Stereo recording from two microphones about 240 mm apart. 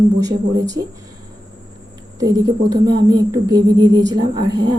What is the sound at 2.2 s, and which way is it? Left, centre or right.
A woman's voice, centre.